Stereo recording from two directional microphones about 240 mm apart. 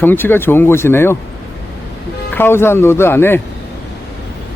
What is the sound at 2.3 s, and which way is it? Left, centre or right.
Speech, centre.